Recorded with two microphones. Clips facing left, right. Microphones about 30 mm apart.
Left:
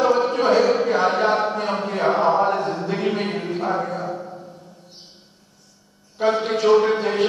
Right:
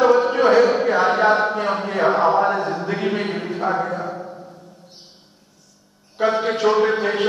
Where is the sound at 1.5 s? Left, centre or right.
Right.